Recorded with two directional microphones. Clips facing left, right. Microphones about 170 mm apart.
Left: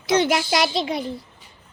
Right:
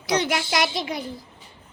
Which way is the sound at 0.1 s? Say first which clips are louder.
Left 4 dB; 25° left (ahead or behind).